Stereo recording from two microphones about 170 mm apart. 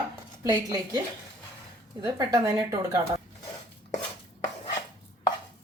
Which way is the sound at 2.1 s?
20° right (ahead or behind).